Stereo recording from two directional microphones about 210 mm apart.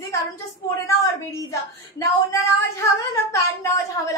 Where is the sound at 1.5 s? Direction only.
15° left (ahead or behind).